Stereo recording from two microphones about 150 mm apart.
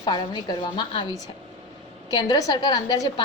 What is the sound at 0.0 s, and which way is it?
A woman's voice, 30° left (ahead or behind).